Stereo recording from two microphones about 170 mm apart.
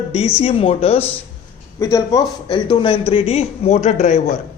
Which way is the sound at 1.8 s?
20° left (ahead or behind).